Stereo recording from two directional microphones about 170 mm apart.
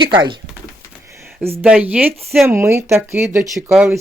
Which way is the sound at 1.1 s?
15° right (ahead or behind).